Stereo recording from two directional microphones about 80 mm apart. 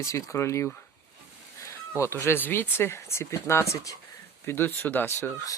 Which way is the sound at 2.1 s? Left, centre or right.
Left.